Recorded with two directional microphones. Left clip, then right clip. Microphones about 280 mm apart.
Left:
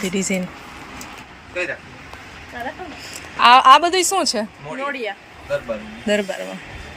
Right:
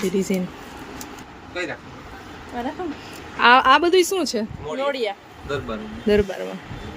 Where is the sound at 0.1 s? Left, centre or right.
Centre.